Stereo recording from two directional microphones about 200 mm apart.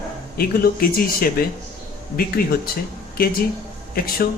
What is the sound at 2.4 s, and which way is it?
Speech, 50° left (ahead or behind).